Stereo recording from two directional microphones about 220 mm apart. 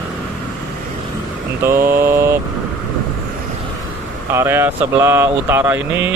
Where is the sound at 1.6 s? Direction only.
10° right (ahead or behind).